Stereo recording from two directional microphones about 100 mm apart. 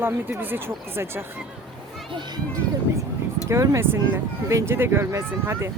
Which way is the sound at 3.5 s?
30° right (ahead or behind).